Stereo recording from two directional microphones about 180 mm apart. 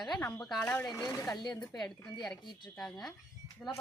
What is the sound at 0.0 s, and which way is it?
Speech, 5° left (ahead or behind).